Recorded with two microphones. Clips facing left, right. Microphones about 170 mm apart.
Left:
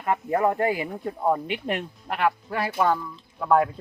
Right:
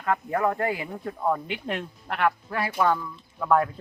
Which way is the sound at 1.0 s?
20° left (ahead or behind).